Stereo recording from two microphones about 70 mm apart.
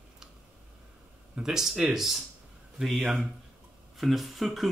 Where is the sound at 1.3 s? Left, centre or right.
Centre.